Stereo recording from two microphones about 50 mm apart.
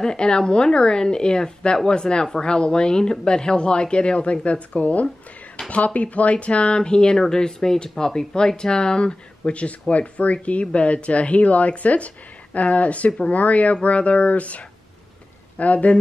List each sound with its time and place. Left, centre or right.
0.0 s a woman's voice: centre
5.6 s a woman's voice: centre
5.9 s speech: left